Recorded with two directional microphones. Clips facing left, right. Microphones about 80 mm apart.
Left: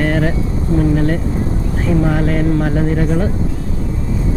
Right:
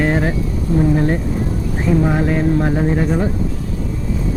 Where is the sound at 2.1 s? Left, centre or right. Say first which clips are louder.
Even; right.